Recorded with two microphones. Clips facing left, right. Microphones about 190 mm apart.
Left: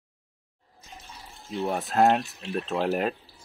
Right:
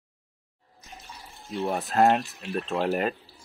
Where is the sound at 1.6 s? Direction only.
Centre (ahead or behind).